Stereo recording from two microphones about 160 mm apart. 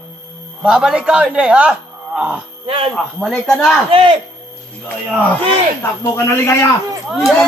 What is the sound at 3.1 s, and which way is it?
Speech, centre (ahead or behind).